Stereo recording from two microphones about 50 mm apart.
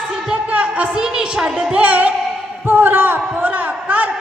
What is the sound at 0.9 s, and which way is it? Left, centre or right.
Speech, centre.